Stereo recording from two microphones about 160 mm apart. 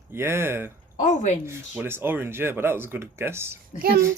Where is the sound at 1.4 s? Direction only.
15° right (ahead or behind).